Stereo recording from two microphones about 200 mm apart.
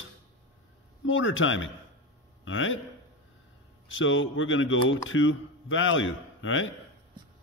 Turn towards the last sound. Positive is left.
turn(degrees=75)  # may be behind; listen again after turning